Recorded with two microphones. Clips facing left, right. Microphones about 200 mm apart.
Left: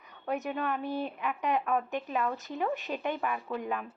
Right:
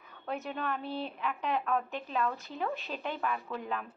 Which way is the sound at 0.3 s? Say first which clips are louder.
Left 3 dB; 15° left (ahead or behind).